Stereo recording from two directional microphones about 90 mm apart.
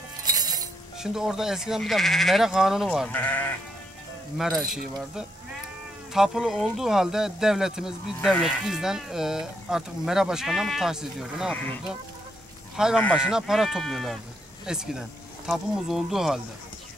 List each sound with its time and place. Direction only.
0.2 s music: 45° right (ahead or behind)
0.9 s speech: 5° right (ahead or behind)
3.1 s speech: 15° left (ahead or behind)
4.4 s speech: centre (ahead or behind)
12.7 s speech: 5° right (ahead or behind)